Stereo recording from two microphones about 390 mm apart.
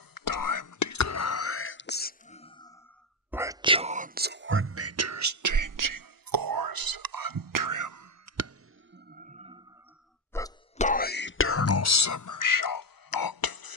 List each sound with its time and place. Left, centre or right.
0.1 s whispering: left; by 2.7 s centre
3.3 s whispering: centre; by 8.5 s right
8.9 s music: right
10.3 s cough: centre
10.9 s whispering: left